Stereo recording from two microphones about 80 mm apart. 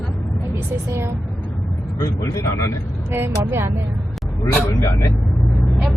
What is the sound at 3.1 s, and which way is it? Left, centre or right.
Speech, right.